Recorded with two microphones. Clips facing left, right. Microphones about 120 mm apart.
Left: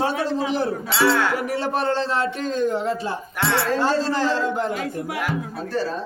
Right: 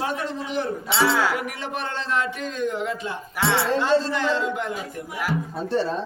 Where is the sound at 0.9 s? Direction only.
10° right (ahead or behind).